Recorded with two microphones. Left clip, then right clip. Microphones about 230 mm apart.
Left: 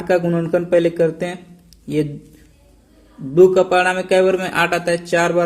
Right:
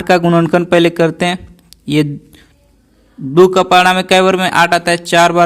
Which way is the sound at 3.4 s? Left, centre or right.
Right.